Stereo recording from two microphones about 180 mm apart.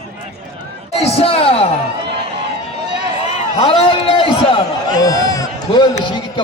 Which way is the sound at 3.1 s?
35° left (ahead or behind).